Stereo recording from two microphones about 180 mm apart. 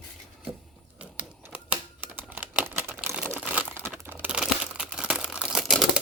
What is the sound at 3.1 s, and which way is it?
Crumpling, 5° right (ahead or behind).